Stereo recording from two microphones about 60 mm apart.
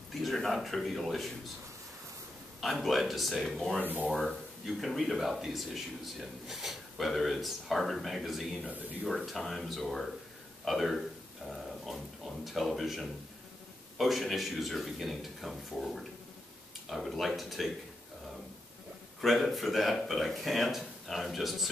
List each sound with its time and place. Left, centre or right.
0.1 s speech: centre
2.6 s speech: centre
3.8 s speech: right
4.1 s speech: centre
8.6 s speech: right
9.0 s a man's voice: centre
11.4 s a sound: centre
12.4 s speech: centre
19.2 s speech: centre